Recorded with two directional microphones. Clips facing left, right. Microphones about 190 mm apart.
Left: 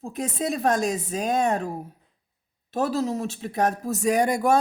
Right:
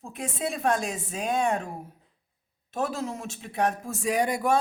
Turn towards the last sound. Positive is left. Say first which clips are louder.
# left 4 dB
turn(degrees=45)  # may be behind; listen again after turning